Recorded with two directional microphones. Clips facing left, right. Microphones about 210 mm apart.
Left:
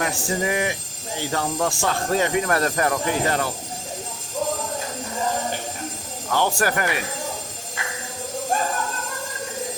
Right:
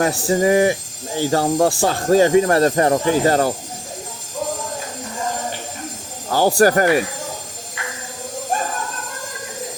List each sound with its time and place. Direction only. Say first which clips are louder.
0.0 s speech: right 8 dB; 35° right (ahead or behind)
6.3 s speech: right 8 dB; 35° right (ahead or behind)